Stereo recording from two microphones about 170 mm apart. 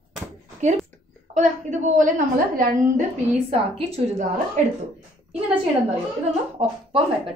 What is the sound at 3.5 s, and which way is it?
Speech, 35° right (ahead or behind).